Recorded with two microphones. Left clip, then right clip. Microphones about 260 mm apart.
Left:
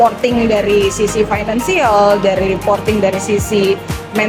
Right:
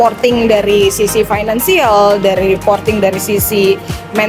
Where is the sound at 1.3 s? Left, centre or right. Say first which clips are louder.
Right 3 dB; right.